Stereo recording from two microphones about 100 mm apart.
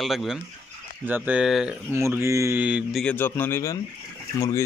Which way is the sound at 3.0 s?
20° left (ahead or behind).